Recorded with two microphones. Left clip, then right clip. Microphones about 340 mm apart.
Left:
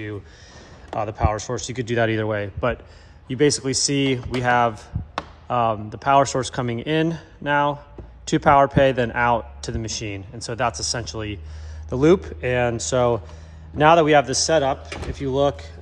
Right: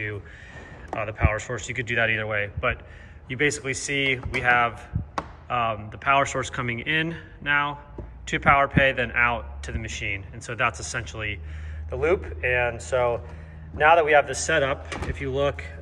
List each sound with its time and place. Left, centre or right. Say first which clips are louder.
0.8 s a man's voice: left 4 dB; centre